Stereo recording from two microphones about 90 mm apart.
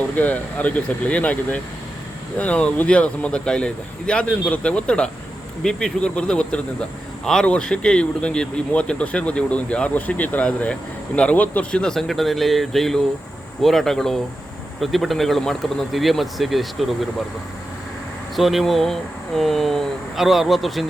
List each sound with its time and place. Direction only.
0.2 s speech: 15° left (ahead or behind); by 17.1 s centre (ahead or behind)
18.3 s speech: centre (ahead or behind)